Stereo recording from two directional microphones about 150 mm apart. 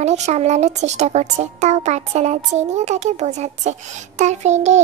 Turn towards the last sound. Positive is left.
turn(degrees=-50)  # may be behind; listen again after turning